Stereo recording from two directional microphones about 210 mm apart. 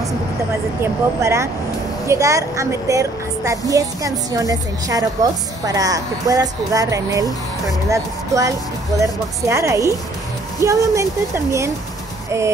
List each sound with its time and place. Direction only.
1.2 s a woman's voice: 15° right (ahead or behind)